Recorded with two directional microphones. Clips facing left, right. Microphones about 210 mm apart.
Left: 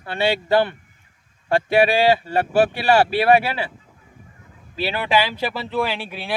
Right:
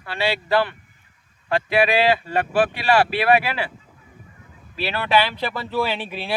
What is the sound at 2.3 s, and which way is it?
Speech, 40° left (ahead or behind).